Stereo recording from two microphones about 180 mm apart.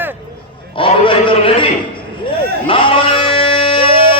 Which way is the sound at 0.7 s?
30° left (ahead or behind).